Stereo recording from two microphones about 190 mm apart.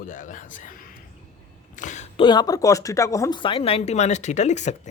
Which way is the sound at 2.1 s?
25° left (ahead or behind).